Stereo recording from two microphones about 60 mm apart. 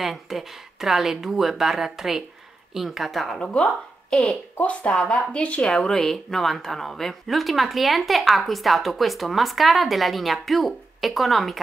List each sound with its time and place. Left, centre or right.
0.0 s speech: centre
3.3 s speech: centre
5.7 s speech: centre